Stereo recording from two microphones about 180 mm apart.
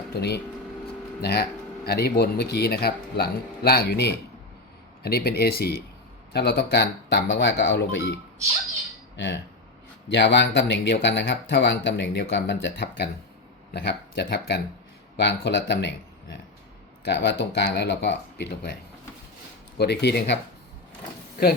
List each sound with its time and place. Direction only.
0.1 s speech: 65° left (ahead or behind); by 8.1 s 85° left
9.1 s speech: 80° left
17.1 s speech: 75° left (ahead or behind)
19.8 s speech: 65° left (ahead or behind)